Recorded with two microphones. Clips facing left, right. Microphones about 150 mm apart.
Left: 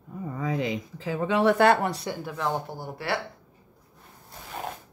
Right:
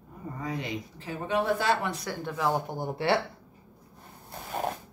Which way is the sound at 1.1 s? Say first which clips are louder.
Left 5 dB; 90° left.